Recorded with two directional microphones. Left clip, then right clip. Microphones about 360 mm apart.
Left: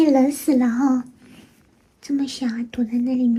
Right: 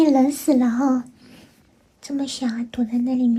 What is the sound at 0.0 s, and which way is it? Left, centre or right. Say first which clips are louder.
A child's voice: even; centre.